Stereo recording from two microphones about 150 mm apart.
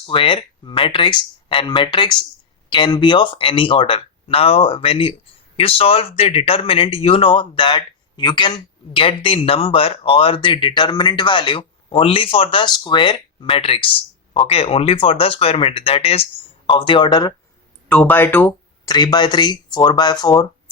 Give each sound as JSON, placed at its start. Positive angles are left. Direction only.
{"t": 0.0, "sound": "speech", "side_deg": 35}
{"t": 17.8, "sound": "speech", "side_deg": 10}
{"t": 18.9, "sound": "speech", "side_deg": 25}